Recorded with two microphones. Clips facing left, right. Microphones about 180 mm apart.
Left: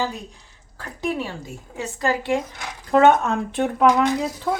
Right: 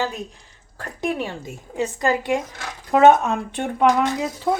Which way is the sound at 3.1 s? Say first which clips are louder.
Right 2 dB; centre (ahead or behind).